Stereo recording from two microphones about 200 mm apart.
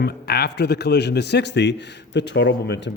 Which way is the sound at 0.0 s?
55° left (ahead or behind).